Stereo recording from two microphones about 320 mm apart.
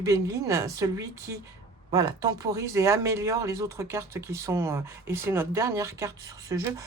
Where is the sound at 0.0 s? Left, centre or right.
Centre.